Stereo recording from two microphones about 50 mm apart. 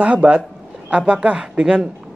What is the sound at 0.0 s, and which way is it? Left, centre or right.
Speech, right.